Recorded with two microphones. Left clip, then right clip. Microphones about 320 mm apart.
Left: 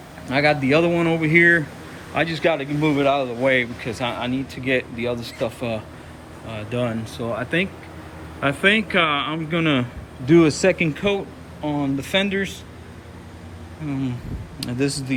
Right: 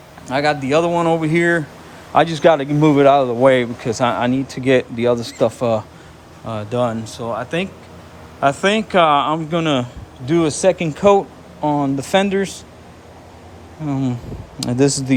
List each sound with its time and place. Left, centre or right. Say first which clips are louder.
0.3 s a man's voice: right 1 dB; centre
13.8 s a man's voice: right 5 dB; centre